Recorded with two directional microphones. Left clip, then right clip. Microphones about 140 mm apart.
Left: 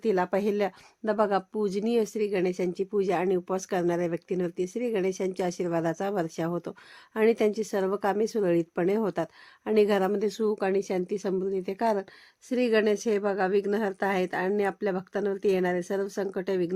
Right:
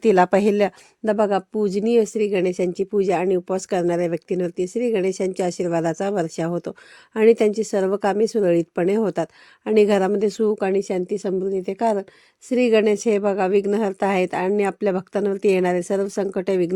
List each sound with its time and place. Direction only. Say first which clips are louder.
0.0 s a woman's voice: right 10 dB; 75° right (ahead or behind); by 16.7 s 55° right (ahead or behind)